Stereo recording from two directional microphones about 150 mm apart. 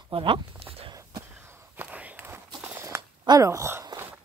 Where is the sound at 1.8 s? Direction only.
10° right (ahead or behind).